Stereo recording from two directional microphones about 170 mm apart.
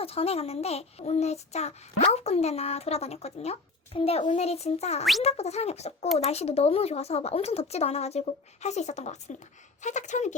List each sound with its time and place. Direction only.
0.0 s speech: 35° left (ahead or behind)